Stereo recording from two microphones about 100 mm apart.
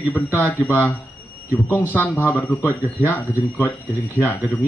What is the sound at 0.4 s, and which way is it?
Speech, 20° left (ahead or behind).